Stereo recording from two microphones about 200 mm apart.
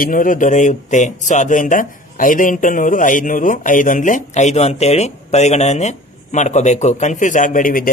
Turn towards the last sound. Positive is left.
turn(degrees=45)  # may be behind; listen again after turning